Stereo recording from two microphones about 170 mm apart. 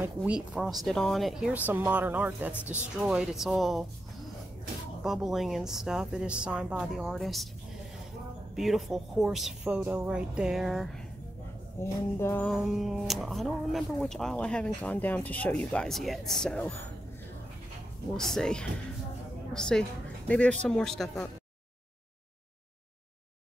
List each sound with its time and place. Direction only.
0.0 s a woman's voice: 5° right (ahead or behind)
2.5 s a sound: 15° left (ahead or behind)
3.0 s speech: 5° right (ahead or behind)
5.0 s speech: 5° right (ahead or behind)
8.5 s speech: centre (ahead or behind)
11.8 s a sound: 15° left (ahead or behind)
12.4 s speech: centre (ahead or behind)
18.1 s a woman's voice: 5° left (ahead or behind)